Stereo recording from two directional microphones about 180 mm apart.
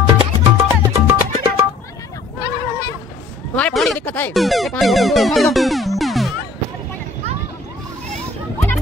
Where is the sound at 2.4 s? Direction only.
20° left (ahead or behind).